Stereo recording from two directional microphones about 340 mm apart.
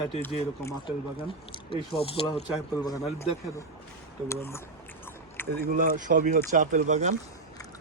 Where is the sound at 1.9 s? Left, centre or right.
Centre.